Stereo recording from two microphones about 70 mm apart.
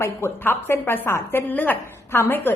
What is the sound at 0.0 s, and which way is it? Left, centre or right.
A woman's voice, left.